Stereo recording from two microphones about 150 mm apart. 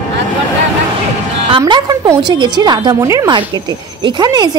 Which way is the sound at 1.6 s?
25° right (ahead or behind).